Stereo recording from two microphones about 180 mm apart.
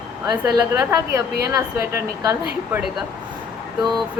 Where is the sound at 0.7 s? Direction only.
15° right (ahead or behind).